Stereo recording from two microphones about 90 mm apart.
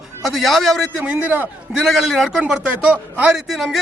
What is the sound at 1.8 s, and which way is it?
A man's voice, centre (ahead or behind).